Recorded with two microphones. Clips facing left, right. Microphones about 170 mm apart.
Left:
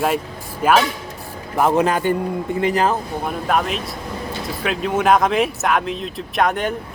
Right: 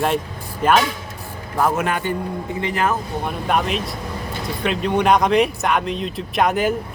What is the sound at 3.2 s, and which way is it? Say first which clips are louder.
Speech: left 1 dB; centre (ahead or behind).